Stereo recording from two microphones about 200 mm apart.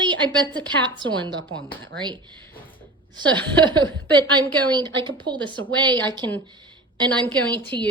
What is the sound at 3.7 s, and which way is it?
A woman's voice, 20° right (ahead or behind).